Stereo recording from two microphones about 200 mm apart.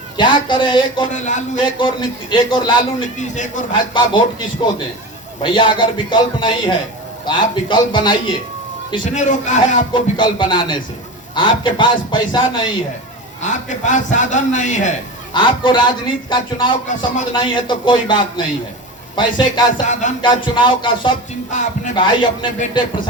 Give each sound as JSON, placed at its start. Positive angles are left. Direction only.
{"t": 0.2, "sound": "speech", "side_deg": 25}
{"t": 1.1, "sound": "a man's voice", "side_deg": 35}
{"t": 1.5, "sound": "speech", "side_deg": 25}
{"t": 3.2, "sound": "a man's voice", "side_deg": 40}
{"t": 3.8, "sound": "speech", "side_deg": 25}
{"t": 9.1, "sound": "a man's voice", "side_deg": 35}
{"t": 9.9, "sound": "speech", "side_deg": 25}
{"t": 13.4, "sound": "a man's voice", "side_deg": 40}
{"t": 15.3, "sound": "speech", "side_deg": 25}
{"t": 19.8, "sound": "a man's voice", "side_deg": 40}
{"t": 20.2, "sound": "speech", "side_deg": 25}
{"t": 21.5, "sound": "a man's voice", "side_deg": 40}
{"t": 21.9, "sound": "speech", "side_deg": 25}